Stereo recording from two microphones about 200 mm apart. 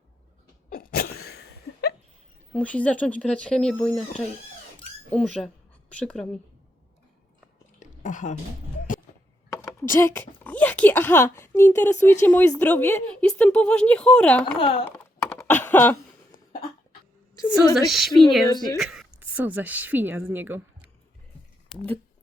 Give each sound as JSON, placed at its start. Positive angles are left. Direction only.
{"t": 0.7, "sound": "a sound", "side_deg": 50}
{"t": 2.6, "sound": "speech", "side_deg": 5}
{"t": 5.1, "sound": "speech", "side_deg": 5}
{"t": 7.8, "sound": "a sound", "side_deg": 40}
{"t": 9.9, "sound": "a woman's voice", "side_deg": 10}
{"t": 14.6, "sound": "speech", "side_deg": 25}
{"t": 14.8, "sound": "typing", "side_deg": 10}
{"t": 17.8, "sound": "speech", "side_deg": 0}
{"t": 18.5, "sound": "speech", "side_deg": 20}
{"t": 18.8, "sound": "a woman's voice", "side_deg": 0}